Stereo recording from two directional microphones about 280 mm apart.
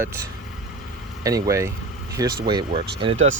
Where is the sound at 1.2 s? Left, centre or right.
Centre.